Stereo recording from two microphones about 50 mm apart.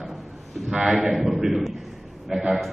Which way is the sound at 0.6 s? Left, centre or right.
Centre.